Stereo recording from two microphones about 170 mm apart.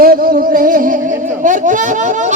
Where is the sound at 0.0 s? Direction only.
60° right (ahead or behind).